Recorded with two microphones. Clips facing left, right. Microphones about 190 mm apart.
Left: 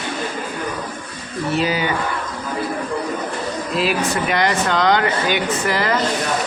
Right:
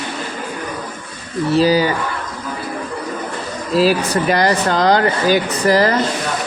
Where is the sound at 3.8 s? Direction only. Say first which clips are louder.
Right 6 dB; 35° right (ahead or behind).